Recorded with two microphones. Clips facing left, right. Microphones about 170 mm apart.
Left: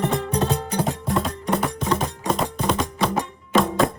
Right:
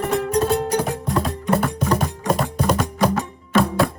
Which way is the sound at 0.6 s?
65° right (ahead or behind).